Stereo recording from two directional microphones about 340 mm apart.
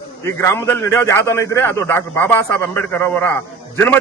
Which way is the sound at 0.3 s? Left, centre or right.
Centre.